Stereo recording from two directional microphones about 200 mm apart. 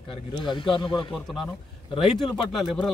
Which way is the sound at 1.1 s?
Centre (ahead or behind).